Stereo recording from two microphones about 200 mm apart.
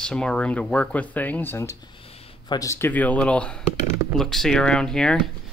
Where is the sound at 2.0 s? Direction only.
30° left (ahead or behind).